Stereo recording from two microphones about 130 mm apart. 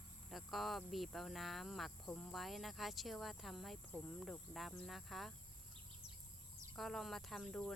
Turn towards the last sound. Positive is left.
turn(degrees=5)  # may be behind; listen again after turning